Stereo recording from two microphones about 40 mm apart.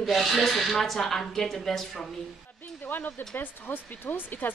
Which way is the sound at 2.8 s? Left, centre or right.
Left.